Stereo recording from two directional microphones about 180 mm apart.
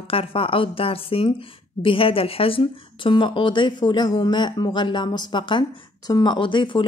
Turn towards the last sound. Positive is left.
turn(degrees=25)  # may be behind; listen again after turning